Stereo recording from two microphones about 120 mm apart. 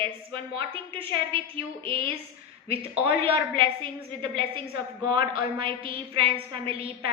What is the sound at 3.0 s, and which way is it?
A woman's voice, 50° right (ahead or behind).